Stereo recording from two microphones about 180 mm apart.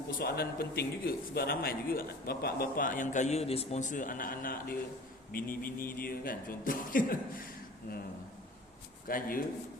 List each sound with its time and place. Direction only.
0.2 s a man's voice: 60° left (ahead or behind)
9.0 s a man's voice: 50° left (ahead or behind)